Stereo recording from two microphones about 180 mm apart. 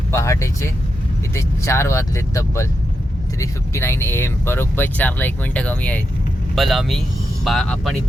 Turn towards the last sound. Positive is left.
turn(degrees=0)  # may be behind; listen again after turning